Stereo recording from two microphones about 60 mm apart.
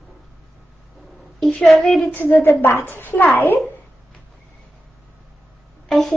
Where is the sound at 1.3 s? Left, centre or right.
Centre.